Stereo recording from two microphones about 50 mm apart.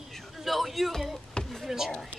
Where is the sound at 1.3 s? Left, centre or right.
Centre.